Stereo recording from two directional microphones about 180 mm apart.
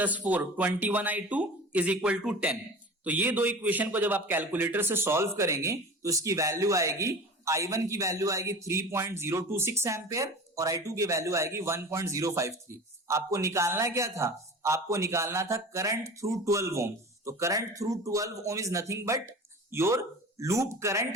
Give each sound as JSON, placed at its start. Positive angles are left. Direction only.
{"t": 0.0, "sound": "a man's voice", "side_deg": -10}